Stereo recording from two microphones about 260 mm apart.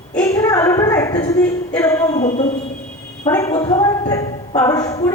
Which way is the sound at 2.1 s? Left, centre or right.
Left.